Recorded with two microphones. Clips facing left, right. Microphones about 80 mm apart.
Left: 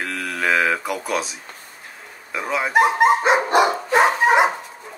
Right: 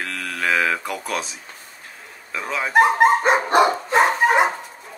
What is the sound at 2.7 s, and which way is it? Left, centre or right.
Dog, right.